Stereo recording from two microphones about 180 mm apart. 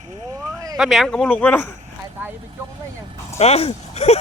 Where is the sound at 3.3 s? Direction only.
35° left (ahead or behind).